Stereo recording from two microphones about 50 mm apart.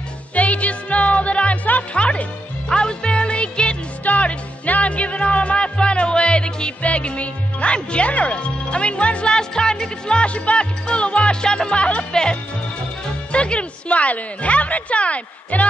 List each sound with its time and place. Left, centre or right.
0.3 s music: left
13.3 s speech: left